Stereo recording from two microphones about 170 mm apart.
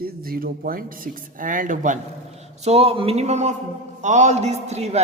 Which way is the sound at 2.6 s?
35° right (ahead or behind).